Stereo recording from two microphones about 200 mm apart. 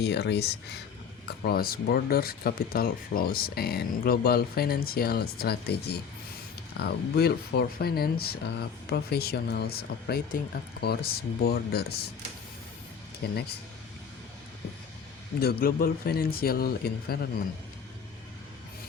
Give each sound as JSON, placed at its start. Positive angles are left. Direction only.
{"t": 0.0, "sound": "speech", "side_deg": 60}
{"t": 13.2, "sound": "speech", "side_deg": 55}
{"t": 15.4, "sound": "speech", "side_deg": 50}